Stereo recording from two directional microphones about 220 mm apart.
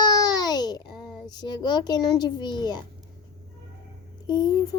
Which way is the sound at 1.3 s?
20° left (ahead or behind).